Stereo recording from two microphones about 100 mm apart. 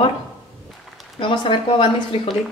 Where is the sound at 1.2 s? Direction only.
55° left (ahead or behind).